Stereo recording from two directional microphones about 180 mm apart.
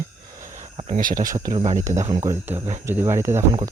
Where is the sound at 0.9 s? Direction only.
50° right (ahead or behind).